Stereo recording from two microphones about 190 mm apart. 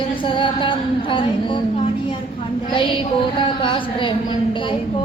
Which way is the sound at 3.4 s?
25° left (ahead or behind).